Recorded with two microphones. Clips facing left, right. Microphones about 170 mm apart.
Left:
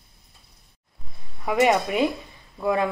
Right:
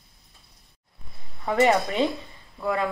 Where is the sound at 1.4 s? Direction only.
10° left (ahead or behind).